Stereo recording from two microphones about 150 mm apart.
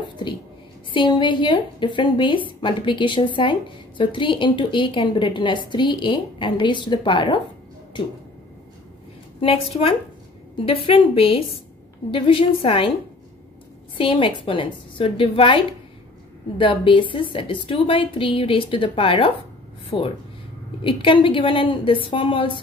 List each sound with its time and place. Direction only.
0.9 s a woman's voice: 35° left (ahead or behind)
9.4 s a woman's voice: 40° left (ahead or behind)
13.9 s a woman's voice: 35° left (ahead or behind)